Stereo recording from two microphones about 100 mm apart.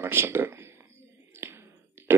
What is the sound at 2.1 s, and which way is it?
Speech, 25° right (ahead or behind).